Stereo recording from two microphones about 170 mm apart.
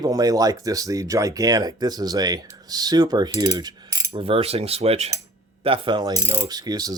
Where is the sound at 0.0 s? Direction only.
20° right (ahead or behind).